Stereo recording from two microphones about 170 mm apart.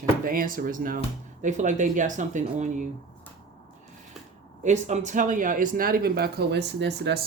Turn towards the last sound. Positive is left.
turn(degrees=-85)